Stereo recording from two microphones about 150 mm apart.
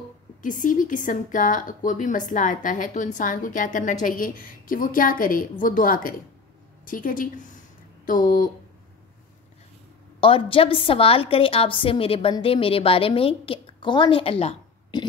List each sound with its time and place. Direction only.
0.4 s speech: 60° left (ahead or behind)
10.2 s a woman's voice: 35° left (ahead or behind)